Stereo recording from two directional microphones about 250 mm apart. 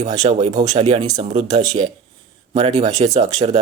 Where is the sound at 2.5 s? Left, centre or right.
Right.